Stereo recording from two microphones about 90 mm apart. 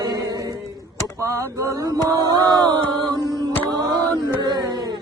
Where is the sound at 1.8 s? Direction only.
55° right (ahead or behind).